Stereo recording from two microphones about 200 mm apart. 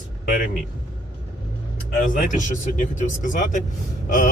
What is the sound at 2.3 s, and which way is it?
Speech, 40° left (ahead or behind).